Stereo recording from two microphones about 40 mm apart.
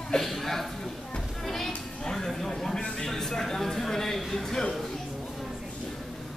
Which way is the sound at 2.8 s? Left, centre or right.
Centre.